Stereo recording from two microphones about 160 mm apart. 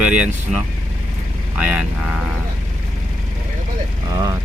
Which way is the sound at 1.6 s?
5° right (ahead or behind).